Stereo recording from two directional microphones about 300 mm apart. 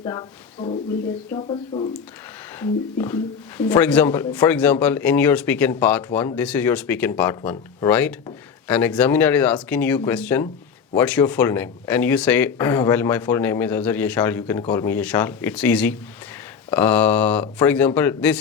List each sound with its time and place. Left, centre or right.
0.0 s speech: centre